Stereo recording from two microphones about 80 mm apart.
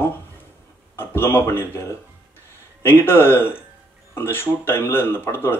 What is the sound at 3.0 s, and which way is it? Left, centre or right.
A man's voice, left.